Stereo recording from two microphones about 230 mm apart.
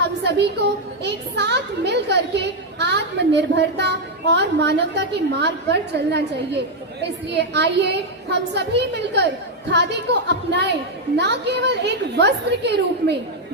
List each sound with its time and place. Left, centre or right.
0.0 s a woman's voice: right